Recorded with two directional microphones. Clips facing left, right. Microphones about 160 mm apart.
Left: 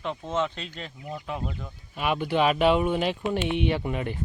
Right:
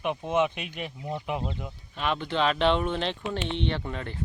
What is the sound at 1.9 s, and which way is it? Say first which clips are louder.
Speech: left 3 dB; 10° left (ahead or behind).